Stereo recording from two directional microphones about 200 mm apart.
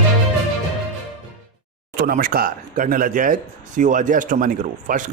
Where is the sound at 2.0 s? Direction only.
45° right (ahead or behind).